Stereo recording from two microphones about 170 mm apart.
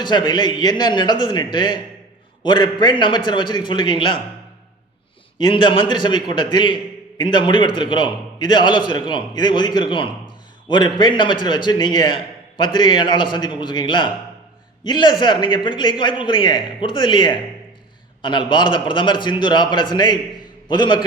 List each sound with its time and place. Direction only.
0.0 s a man's voice: 25° left (ahead or behind)
5.4 s a man's voice: 25° left (ahead or behind)